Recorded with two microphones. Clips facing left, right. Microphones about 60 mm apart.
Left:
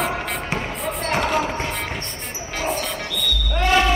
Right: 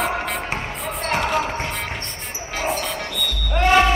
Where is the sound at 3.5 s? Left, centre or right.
Right.